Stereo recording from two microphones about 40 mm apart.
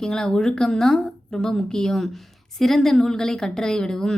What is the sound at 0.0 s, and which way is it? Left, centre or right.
A woman's voice, centre.